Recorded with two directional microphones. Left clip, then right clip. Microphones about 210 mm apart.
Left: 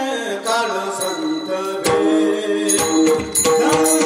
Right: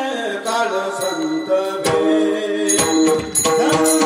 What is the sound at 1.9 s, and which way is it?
Music, 55° left (ahead or behind).